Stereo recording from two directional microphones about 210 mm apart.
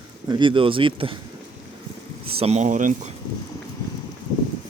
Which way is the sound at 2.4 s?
30° right (ahead or behind).